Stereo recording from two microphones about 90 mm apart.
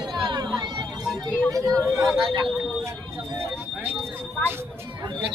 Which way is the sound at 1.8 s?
40° right (ahead or behind).